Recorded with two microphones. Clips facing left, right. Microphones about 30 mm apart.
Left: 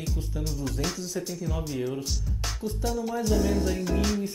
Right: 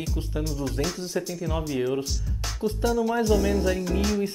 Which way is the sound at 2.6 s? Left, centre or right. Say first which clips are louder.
Right 9 dB; right.